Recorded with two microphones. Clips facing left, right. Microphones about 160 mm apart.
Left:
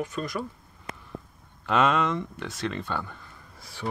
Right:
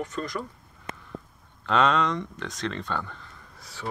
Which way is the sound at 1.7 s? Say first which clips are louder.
Even; 10° left (ahead or behind).